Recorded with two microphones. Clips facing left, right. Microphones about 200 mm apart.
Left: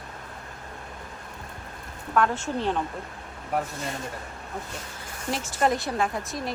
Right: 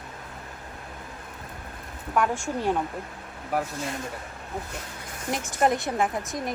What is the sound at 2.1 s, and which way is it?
Speech, 10° right (ahead or behind).